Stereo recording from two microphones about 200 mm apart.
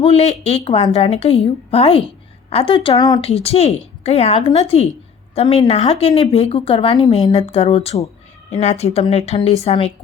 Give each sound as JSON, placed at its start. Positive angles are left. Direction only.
{"t": 0.0, "sound": "a woman's voice", "side_deg": 30}